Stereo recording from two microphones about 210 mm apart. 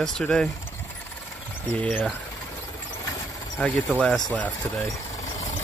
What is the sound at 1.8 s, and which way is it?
Speech, 5° left (ahead or behind).